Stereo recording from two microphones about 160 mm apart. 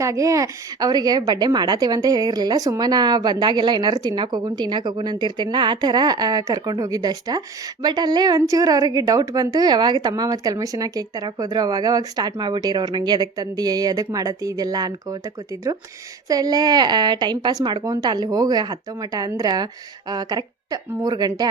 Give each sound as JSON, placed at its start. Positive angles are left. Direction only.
{"t": 0.0, "sound": "a woman's voice", "side_deg": -20}